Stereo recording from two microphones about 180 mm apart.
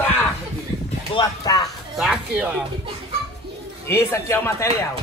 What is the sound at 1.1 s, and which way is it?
Speech, 25° left (ahead or behind).